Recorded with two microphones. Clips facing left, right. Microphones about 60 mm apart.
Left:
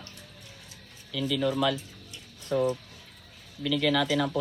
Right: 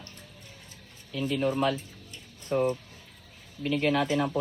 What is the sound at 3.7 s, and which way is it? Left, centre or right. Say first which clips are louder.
Speech: even; left.